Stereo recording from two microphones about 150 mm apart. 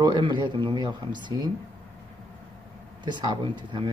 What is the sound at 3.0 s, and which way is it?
Speech, 30° right (ahead or behind).